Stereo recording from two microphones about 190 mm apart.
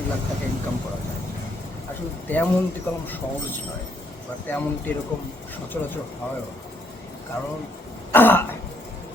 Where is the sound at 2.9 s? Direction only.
10° left (ahead or behind).